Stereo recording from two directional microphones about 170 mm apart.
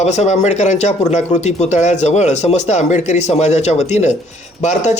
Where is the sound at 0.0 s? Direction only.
40° left (ahead or behind).